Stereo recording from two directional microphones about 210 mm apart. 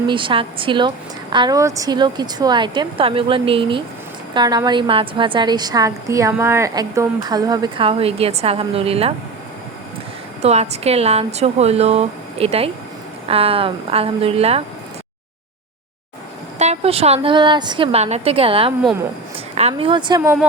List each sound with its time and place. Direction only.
0.1 s a woman's voice: 25° right (ahead or behind)
10.4 s a woman's voice: 30° right (ahead or behind)
16.6 s a woman's voice: 30° right (ahead or behind)